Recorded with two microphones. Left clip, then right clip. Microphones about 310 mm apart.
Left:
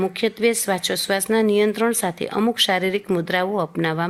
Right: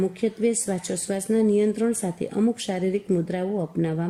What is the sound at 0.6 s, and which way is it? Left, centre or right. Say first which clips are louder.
Speech: left 7 dB; left.